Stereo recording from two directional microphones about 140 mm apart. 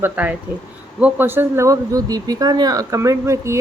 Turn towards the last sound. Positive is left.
turn(degrees=-20)  # may be behind; listen again after turning